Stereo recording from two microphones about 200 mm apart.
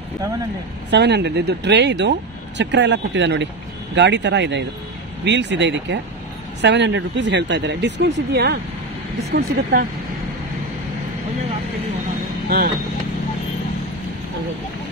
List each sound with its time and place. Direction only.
0.8 s speech: 60° right (ahead or behind)
12.4 s speech: 50° right (ahead or behind)